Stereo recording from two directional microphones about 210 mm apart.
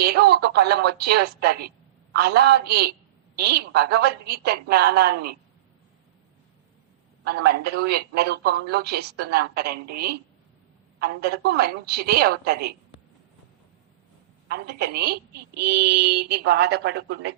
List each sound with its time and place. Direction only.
0.0 s a woman's voice: 50° right (ahead or behind)
7.3 s a woman's voice: 50° right (ahead or behind)
14.5 s a woman's voice: 50° right (ahead or behind)